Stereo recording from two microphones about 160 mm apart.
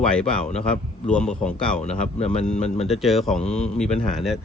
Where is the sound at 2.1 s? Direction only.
45° left (ahead or behind).